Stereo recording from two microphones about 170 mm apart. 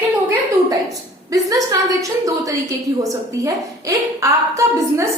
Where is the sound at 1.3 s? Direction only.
20° right (ahead or behind).